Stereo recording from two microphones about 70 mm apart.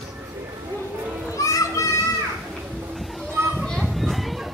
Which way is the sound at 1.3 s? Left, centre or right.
Left.